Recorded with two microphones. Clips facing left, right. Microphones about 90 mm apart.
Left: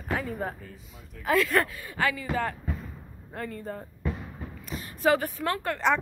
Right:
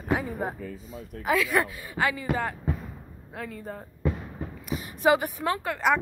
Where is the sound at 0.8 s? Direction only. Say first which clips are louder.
Right 9 dB; 40° right (ahead or behind).